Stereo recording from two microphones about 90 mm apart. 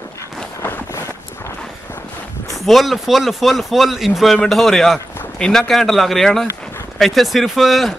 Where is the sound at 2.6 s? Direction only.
Centre (ahead or behind).